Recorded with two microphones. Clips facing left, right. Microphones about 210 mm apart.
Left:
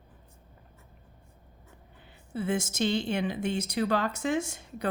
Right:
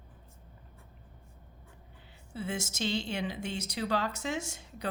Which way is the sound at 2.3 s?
55° left (ahead or behind).